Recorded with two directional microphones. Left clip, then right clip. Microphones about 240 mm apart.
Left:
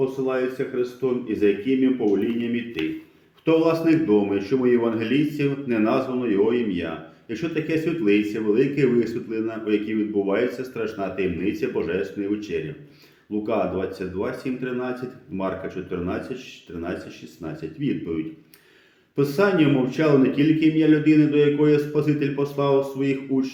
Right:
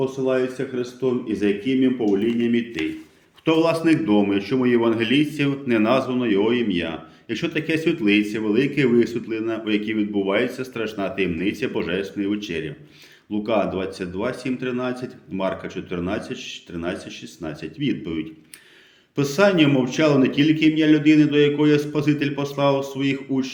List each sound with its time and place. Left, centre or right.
0.0 s a man's voice: right
3.4 s a man's voice: right